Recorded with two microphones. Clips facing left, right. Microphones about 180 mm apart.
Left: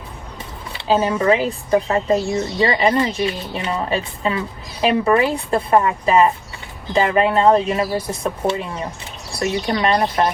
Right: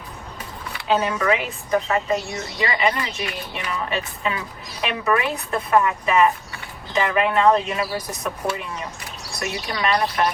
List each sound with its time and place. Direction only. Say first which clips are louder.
0.7 s speech: left 4 dB; 30° left (ahead or behind)